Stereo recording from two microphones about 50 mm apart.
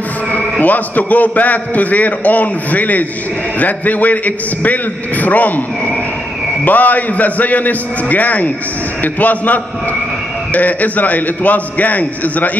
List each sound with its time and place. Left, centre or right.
0.3 s a man's voice: left
6.6 s a man's voice: left